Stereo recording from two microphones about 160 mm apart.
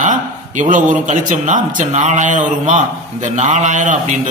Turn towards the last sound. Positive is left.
turn(degrees=-50)  # may be behind; listen again after turning